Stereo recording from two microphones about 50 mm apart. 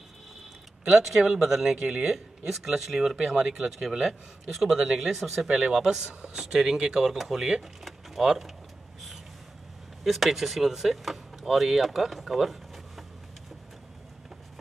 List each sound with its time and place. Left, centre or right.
0.8 s speech: centre
1.8 s speech: centre
2.0 s speech: centre
7.8 s a sound: centre
10.0 s speech: centre